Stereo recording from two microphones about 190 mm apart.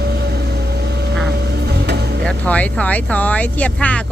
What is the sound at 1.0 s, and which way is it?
Vehicle, 60° right (ahead or behind).